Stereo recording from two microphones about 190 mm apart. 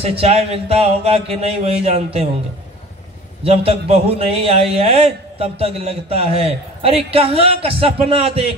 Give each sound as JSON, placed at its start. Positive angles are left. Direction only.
{"t": 0.0, "sound": "a man's voice", "side_deg": -30}
{"t": 3.4, "sound": "a man's voice", "side_deg": -30}